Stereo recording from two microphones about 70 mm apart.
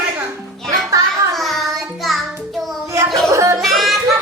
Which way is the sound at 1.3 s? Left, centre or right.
Centre.